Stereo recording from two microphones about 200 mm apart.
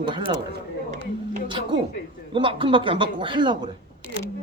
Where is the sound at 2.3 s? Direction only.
25° right (ahead or behind).